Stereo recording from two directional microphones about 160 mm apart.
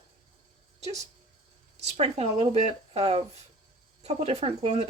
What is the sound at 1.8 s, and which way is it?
Speech, 40° right (ahead or behind).